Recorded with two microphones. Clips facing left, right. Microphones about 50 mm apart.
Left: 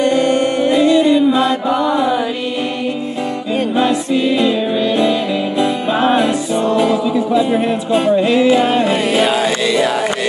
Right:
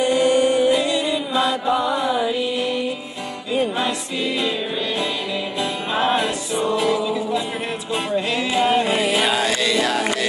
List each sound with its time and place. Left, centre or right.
0.0 s music: left
1.7 s mantra: left
3.7 s music: centre